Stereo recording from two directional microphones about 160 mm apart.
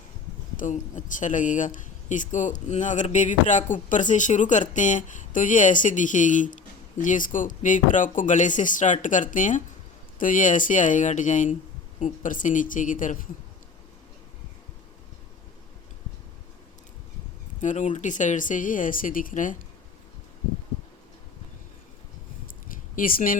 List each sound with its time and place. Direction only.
0.6 s speech: 50° left (ahead or behind)
17.6 s speech: 50° left (ahead or behind)
23.0 s speech: 60° left (ahead or behind)